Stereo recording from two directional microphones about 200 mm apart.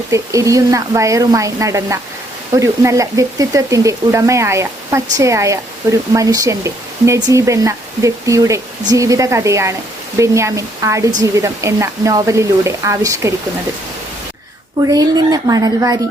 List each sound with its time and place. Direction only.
0.1 s speech: 15° right (ahead or behind)
14.8 s speech: 20° right (ahead or behind)